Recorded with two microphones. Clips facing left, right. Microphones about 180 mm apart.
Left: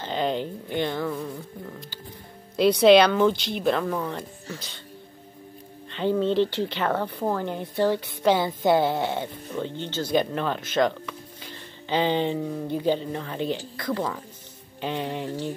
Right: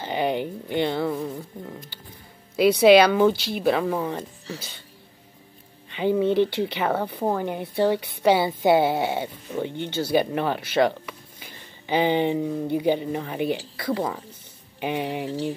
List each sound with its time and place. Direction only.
0.0 s a sound: 10° right (ahead or behind)
0.7 s speech: 15° right (ahead or behind)
1.0 s speech: 25° right (ahead or behind)
2.5 s speech: 5° right (ahead or behind)
5.9 s speech: 10° right (ahead or behind)